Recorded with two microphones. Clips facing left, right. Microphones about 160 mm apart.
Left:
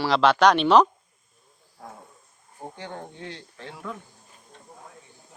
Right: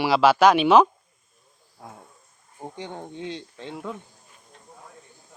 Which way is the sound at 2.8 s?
20° right (ahead or behind).